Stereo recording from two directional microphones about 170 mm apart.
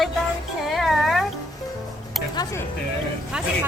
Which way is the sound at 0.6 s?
Centre (ahead or behind).